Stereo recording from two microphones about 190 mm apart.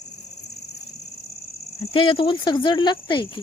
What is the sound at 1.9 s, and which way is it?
Speech, 25° left (ahead or behind).